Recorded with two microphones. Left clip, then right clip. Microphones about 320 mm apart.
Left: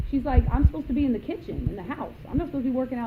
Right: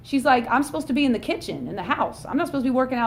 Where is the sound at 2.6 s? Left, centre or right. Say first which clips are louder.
Right 7 dB; right.